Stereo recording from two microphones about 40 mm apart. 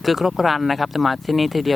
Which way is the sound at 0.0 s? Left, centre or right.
Centre.